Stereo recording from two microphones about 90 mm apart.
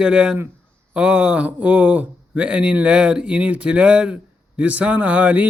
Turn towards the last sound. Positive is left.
turn(degrees=-15)  # may be behind; listen again after turning